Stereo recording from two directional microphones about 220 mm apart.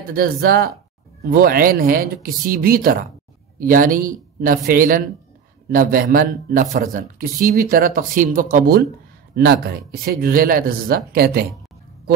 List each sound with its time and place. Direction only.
0.1 s speech: 45° right (ahead or behind)